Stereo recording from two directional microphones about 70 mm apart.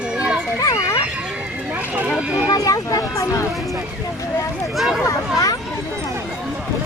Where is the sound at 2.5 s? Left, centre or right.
Left.